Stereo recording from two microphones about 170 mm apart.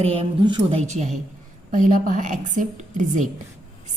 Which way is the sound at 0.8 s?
40° right (ahead or behind).